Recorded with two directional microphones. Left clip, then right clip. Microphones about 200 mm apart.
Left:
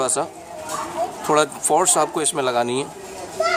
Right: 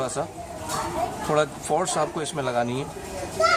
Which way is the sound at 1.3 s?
50° left (ahead or behind).